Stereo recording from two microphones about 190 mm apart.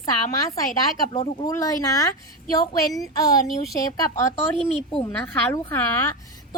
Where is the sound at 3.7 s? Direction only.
15° left (ahead or behind).